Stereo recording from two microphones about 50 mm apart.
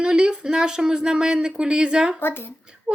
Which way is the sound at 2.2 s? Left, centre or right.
Left.